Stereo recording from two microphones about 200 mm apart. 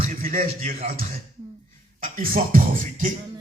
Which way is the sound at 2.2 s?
45° right (ahead or behind).